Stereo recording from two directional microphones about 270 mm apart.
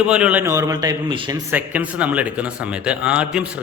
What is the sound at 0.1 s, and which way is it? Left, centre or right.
A man's voice, centre.